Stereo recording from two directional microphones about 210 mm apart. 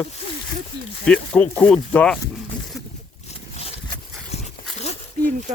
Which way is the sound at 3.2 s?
30° left (ahead or behind).